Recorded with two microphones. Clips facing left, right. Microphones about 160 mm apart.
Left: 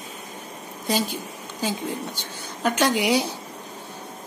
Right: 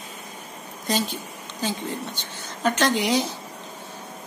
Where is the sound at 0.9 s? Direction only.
10° left (ahead or behind).